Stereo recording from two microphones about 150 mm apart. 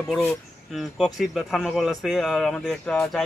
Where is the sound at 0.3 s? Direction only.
Centre (ahead or behind).